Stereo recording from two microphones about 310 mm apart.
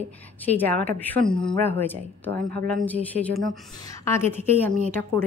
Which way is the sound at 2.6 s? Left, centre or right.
Centre.